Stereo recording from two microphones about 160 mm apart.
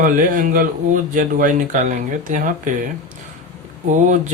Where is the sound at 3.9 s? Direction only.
50° right (ahead or behind).